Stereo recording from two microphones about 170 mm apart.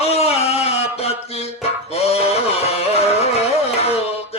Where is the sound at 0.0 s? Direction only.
35° left (ahead or behind).